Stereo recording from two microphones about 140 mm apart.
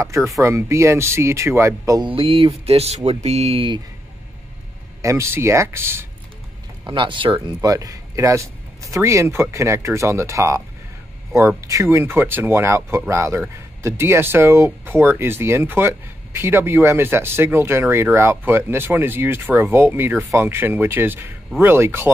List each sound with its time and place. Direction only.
0.0 s speech: 20° right (ahead or behind)
2.0 s speech: 40° right (ahead or behind)
5.0 s speech: 20° right (ahead or behind)
6.9 s speech: 35° right (ahead or behind); by 22.1 s 15° right (ahead or behind)